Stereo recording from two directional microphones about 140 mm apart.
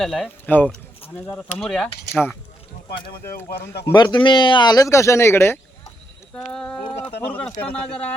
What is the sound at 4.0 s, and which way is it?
Speech, 30° left (ahead or behind).